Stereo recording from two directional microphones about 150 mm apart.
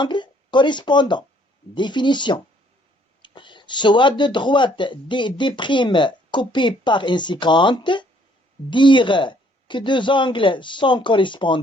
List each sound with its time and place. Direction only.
0.0 s speech: 30° left (ahead or behind)